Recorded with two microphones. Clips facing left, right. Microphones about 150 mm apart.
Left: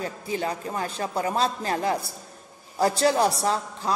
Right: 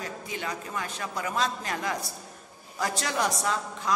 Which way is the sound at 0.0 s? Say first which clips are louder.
Left 6 dB; 30° left (ahead or behind).